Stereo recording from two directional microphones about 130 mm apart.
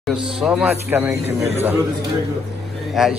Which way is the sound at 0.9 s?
15° right (ahead or behind).